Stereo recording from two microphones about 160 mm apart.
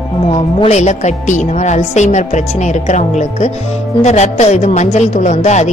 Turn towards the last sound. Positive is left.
turn(degrees=45)  # may be behind; listen again after turning